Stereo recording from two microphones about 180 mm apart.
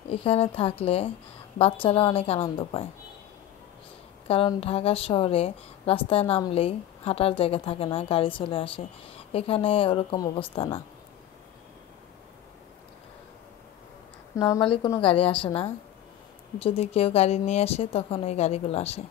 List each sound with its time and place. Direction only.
0.1 s speech: 30° left (ahead or behind)
4.3 s speech: 30° left (ahead or behind)
14.3 s a woman's voice: 25° left (ahead or behind)